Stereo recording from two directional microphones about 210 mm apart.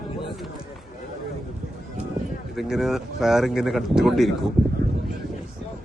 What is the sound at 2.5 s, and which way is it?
Speech, centre (ahead or behind).